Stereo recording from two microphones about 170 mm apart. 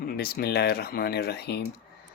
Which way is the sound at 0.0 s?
60° left (ahead or behind).